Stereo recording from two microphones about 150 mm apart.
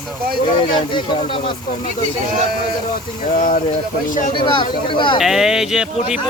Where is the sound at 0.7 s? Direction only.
30° left (ahead or behind).